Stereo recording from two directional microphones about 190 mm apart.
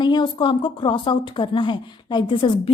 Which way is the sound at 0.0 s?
25° left (ahead or behind).